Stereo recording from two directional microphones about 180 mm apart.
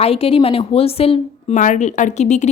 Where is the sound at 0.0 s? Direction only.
30° left (ahead or behind).